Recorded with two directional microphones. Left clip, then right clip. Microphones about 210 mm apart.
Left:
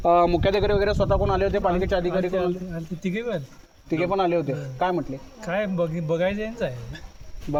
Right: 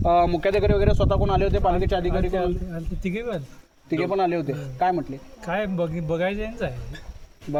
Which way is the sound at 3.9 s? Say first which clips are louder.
Even; 25° left (ahead or behind).